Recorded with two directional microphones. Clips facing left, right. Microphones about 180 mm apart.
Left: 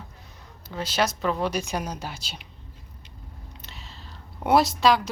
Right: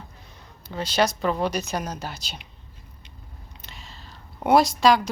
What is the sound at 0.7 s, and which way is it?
Speech, 5° left (ahead or behind).